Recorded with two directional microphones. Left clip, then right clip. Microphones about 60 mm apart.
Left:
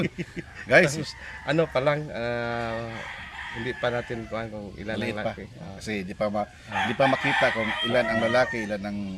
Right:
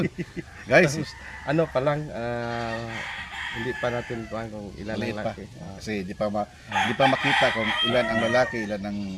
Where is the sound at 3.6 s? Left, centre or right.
Left.